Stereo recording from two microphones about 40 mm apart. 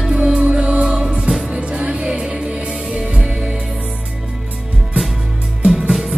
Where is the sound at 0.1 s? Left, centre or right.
Right.